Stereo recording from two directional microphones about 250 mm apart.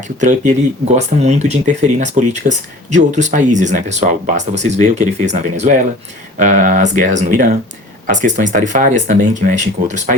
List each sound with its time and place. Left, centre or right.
0.2 s speech: right